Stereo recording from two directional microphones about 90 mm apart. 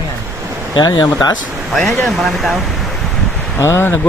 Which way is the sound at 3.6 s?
30° left (ahead or behind).